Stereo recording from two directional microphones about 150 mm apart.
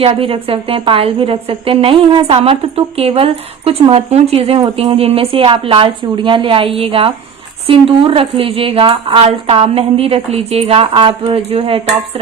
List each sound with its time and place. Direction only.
0.0 s a woman's voice: 35° right (ahead or behind)